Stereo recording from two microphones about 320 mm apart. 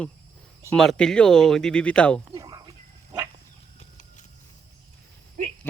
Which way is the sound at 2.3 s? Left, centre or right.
Centre.